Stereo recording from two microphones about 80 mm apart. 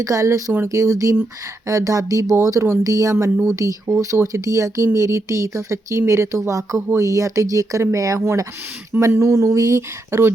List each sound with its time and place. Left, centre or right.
0.0 s speech: right